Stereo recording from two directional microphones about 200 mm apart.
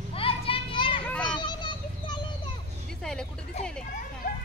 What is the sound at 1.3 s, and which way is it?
Children playing, 20° left (ahead or behind).